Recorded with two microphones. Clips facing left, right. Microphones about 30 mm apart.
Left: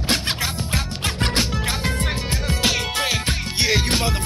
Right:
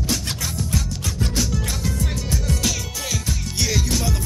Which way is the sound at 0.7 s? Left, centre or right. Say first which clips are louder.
Left 2 dB; left.